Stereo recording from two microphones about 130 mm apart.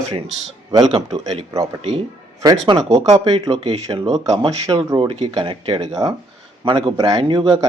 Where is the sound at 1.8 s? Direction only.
45° right (ahead or behind).